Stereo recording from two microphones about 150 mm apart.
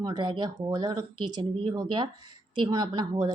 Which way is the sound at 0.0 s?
30° right (ahead or behind).